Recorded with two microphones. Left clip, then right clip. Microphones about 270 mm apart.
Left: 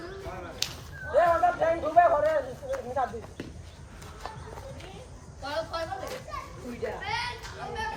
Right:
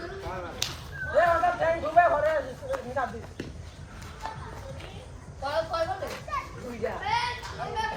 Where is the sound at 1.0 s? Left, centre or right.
Left.